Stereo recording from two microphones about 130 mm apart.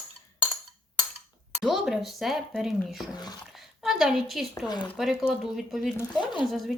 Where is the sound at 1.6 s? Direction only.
Centre (ahead or behind).